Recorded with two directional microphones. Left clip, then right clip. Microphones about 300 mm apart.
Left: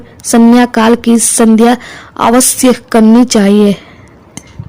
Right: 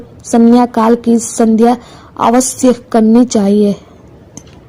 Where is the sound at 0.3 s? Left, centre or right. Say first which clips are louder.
Left 2 dB; left.